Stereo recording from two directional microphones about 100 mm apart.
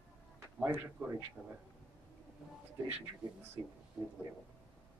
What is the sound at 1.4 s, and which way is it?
Speech, 5° right (ahead or behind).